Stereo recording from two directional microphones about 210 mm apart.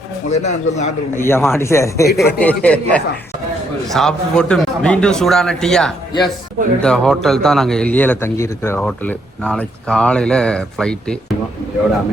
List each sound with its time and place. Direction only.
0.3 s speech: 35° left (ahead or behind)
1.1 s speech: 10° left (ahead or behind)